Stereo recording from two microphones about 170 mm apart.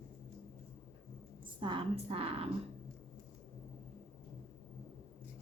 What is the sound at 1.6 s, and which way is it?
Speech, 30° right (ahead or behind).